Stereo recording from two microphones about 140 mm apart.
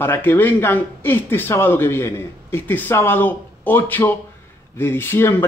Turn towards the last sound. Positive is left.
turn(degrees=15)  # may be behind; listen again after turning